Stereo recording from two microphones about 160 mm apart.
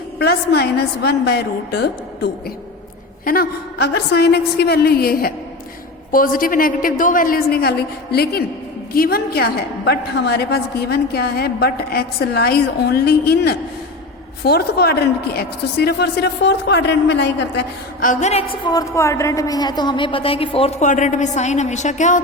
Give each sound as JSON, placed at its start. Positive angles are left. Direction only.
{"t": 0.2, "sound": "speech", "side_deg": 80}
{"t": 3.2, "sound": "a woman's voice", "side_deg": 65}
{"t": 18.1, "sound": "a woman's voice", "side_deg": 45}
{"t": 18.6, "sound": "a woman's voice", "side_deg": 25}